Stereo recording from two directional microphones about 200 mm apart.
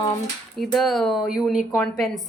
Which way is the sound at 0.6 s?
Centre (ahead or behind).